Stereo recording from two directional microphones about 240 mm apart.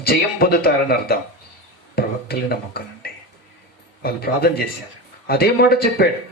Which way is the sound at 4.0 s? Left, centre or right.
Left.